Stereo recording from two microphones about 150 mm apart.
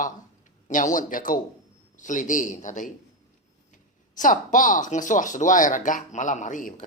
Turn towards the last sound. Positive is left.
turn(degrees=60)  # may be behind; listen again after turning